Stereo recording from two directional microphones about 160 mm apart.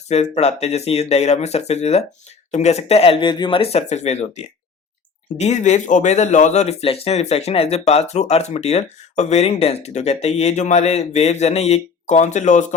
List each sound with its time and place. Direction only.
0.1 s speech: 45° left (ahead or behind)